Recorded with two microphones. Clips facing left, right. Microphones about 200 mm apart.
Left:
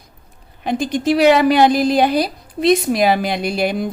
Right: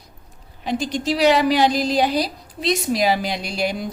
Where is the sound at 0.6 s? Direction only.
55° left (ahead or behind).